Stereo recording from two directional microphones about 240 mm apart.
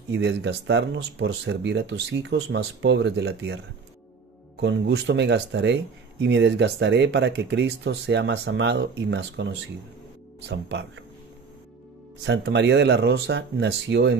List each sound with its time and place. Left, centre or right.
0.1 s speech: right
4.6 s speech: right
12.3 s speech: right